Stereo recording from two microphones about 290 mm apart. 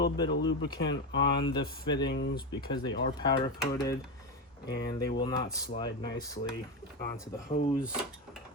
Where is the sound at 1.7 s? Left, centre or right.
Centre.